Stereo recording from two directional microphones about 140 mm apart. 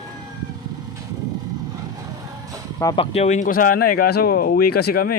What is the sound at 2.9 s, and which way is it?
Speech, 50° left (ahead or behind).